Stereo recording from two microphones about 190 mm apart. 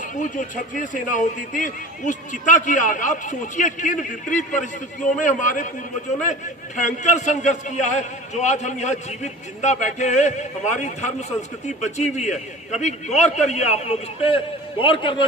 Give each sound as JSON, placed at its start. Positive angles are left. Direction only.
{"t": 0.2, "sound": "a man's voice", "side_deg": 40}
{"t": 6.7, "sound": "a man's voice", "side_deg": 40}